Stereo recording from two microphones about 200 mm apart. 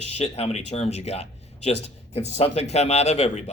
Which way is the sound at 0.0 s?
30° left (ahead or behind).